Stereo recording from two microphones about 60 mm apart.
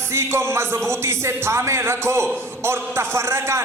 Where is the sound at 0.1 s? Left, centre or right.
Right.